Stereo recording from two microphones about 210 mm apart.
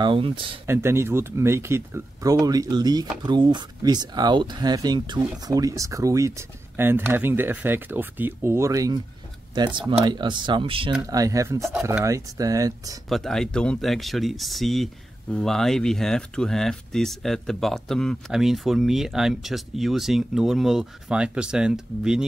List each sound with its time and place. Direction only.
0.0 s speech: 25° right (ahead or behind)
0.7 s speech: 10° right (ahead or behind)
13.1 s speech: centre (ahead or behind)